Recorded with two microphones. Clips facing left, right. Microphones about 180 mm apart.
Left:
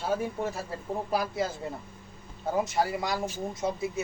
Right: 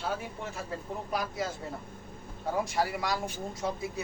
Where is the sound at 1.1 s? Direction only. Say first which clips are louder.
Left 4 dB; 25° left (ahead or behind).